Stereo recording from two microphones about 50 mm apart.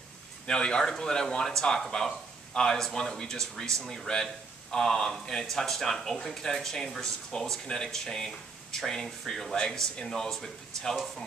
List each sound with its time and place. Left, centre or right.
0.5 s speech: centre